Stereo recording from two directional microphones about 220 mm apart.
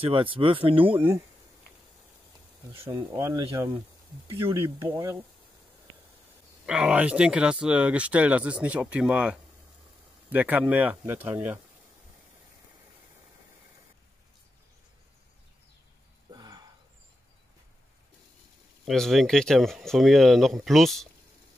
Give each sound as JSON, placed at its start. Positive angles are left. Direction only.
{"t": 0.0, "sound": "speech", "side_deg": -25}
{"t": 0.9, "sound": "speech", "side_deg": -10}
{"t": 3.0, "sound": "speech", "side_deg": -15}
{"t": 6.6, "sound": "speech", "side_deg": -5}
{"t": 16.3, "sound": "a sound", "side_deg": -20}
{"t": 18.9, "sound": "speech", "side_deg": 0}